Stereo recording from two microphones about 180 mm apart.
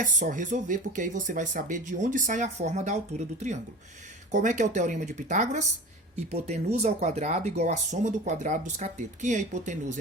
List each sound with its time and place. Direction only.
0.0 s speech: 45° right (ahead or behind)